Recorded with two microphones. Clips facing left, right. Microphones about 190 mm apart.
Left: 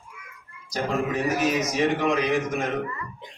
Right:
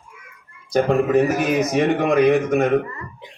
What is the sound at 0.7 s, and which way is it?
Speech, 55° right (ahead or behind).